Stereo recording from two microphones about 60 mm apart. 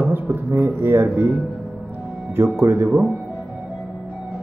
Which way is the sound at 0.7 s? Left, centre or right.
Right.